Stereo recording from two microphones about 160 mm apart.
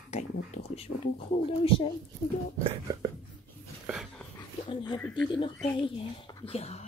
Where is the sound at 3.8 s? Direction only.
5° right (ahead or behind).